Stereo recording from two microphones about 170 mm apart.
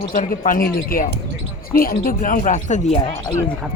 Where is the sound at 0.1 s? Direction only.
55° left (ahead or behind).